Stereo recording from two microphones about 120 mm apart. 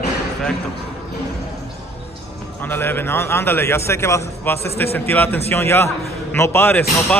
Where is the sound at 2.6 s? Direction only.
20° left (ahead or behind).